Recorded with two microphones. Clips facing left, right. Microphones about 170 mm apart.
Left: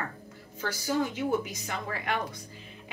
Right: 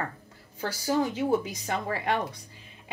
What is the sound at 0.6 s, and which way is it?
A woman's voice, 35° right (ahead or behind).